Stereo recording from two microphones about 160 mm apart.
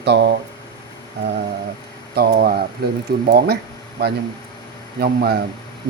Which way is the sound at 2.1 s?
75° right (ahead or behind).